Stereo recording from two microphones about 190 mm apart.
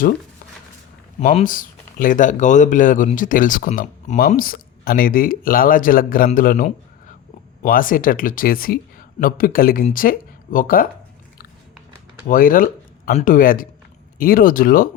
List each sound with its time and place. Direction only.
1.2 s speech: 45° left (ahead or behind)
12.3 s speech: 45° left (ahead or behind)